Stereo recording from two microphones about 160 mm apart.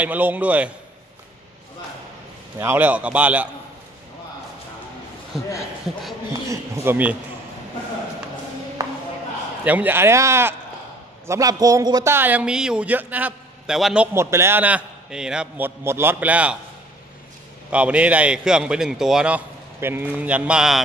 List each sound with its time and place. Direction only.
0.0 s a man's voice: 10° right (ahead or behind)
2.6 s a man's voice: 15° right (ahead or behind)
6.5 s speech: 15° right (ahead or behind)
8.8 s music: 20° right (ahead or behind)
9.7 s a man's voice: 10° right (ahead or behind)
14.1 s a man's voice: 15° right (ahead or behind)
17.6 s a man's voice: 10° right (ahead or behind)